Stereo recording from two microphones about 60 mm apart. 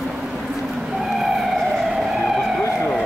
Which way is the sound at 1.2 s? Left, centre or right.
Centre.